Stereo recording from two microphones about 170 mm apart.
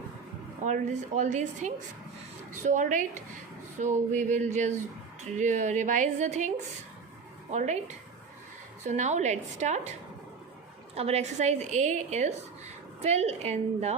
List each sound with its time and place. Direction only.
0.6 s a woman's voice: 45° right (ahead or behind)
7.5 s a woman's voice: 45° right (ahead or behind)
10.9 s a woman's voice: 40° right (ahead or behind)